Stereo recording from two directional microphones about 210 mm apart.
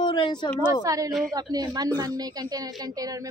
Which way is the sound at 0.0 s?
20° left (ahead or behind).